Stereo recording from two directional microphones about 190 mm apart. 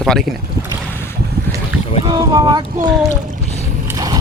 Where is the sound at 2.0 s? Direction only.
20° right (ahead or behind).